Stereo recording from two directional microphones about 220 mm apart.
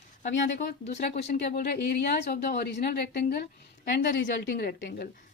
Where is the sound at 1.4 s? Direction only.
45° left (ahead or behind).